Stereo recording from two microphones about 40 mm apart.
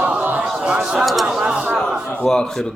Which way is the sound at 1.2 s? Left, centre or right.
Centre.